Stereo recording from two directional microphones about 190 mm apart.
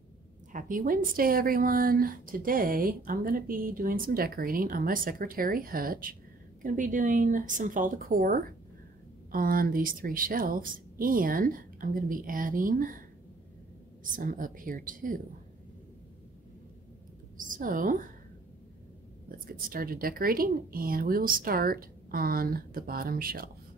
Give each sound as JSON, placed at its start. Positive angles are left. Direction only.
{"t": 0.5, "sound": "speech", "side_deg": -45}
{"t": 14.1, "sound": "speech", "side_deg": -45}
{"t": 17.4, "sound": "a woman's voice", "side_deg": -45}
{"t": 19.2, "sound": "speech", "side_deg": -50}